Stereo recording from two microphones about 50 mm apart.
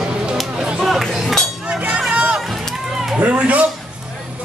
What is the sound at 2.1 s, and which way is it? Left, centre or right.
Run, right.